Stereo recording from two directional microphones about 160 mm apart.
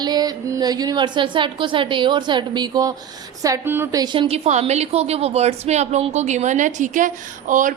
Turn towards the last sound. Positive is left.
turn(degrees=-55)  # may be behind; listen again after turning